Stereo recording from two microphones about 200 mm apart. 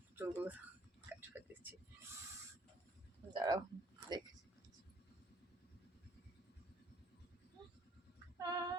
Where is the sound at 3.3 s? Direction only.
20° right (ahead or behind).